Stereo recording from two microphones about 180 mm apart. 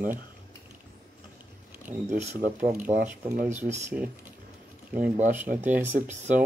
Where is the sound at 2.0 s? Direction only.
40° right (ahead or behind).